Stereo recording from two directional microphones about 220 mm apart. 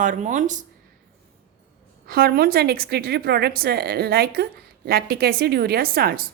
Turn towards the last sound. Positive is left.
turn(degrees=-40)  # may be behind; listen again after turning